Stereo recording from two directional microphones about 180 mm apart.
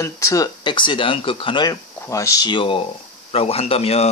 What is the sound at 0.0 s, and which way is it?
Speech, 20° left (ahead or behind).